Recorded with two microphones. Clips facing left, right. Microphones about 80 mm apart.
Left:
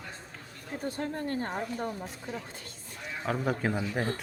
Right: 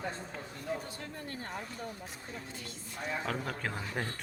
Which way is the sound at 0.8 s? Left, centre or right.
Left.